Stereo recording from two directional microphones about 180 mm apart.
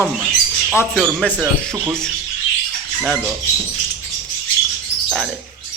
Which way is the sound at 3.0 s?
Centre (ahead or behind).